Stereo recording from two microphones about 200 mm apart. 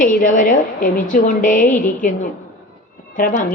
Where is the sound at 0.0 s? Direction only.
40° left (ahead or behind).